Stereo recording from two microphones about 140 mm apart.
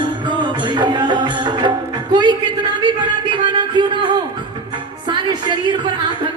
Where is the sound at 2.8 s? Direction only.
35° right (ahead or behind).